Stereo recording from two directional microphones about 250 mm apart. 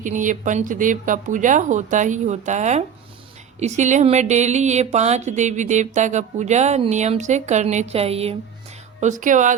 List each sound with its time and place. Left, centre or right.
0.0 s speech: right